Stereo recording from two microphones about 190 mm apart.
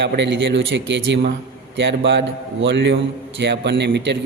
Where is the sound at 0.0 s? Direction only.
70° right (ahead or behind).